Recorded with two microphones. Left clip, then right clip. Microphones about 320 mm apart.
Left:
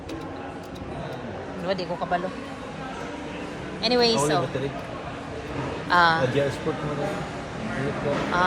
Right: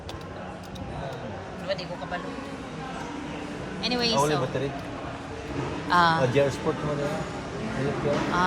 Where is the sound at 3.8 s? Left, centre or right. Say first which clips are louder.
Left 3 dB; centre.